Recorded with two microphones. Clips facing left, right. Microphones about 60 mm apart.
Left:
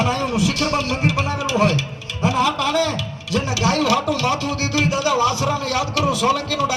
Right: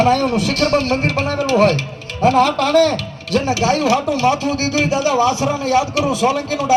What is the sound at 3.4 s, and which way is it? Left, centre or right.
Speech, right.